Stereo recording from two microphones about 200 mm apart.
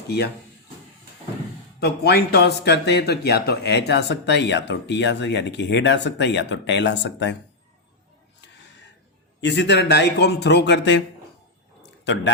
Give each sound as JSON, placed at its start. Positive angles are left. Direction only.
{"t": 0.1, "sound": "speech", "side_deg": 55}
{"t": 1.8, "sound": "speech", "side_deg": 55}
{"t": 9.4, "sound": "speech", "side_deg": 60}
{"t": 11.8, "sound": "a sound", "side_deg": 60}